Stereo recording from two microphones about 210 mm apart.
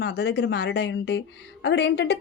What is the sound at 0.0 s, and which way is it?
A woman's voice, 50° left (ahead or behind).